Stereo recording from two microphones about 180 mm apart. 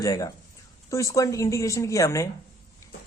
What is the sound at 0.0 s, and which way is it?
A woman's voice, 20° left (ahead or behind).